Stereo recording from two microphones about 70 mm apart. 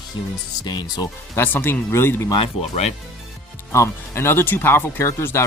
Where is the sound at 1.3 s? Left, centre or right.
Left.